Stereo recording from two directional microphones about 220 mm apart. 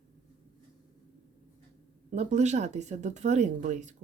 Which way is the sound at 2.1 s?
30° right (ahead or behind).